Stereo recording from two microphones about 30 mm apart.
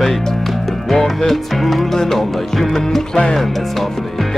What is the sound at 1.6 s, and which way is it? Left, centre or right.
Music, centre.